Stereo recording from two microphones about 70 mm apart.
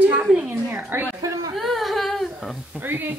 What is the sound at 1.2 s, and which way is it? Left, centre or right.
Speech, right.